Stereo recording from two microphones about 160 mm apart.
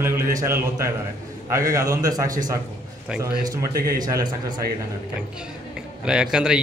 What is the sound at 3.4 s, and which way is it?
Speech, 65° right (ahead or behind).